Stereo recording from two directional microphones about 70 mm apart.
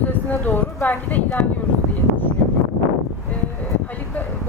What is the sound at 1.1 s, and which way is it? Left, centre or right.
Speech, left.